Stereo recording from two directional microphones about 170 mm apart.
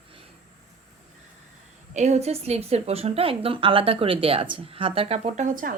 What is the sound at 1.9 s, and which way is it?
A woman's voice, 40° right (ahead or behind).